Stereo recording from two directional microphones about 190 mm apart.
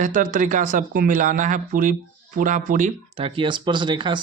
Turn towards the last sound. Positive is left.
turn(degrees=-25)  # may be behind; listen again after turning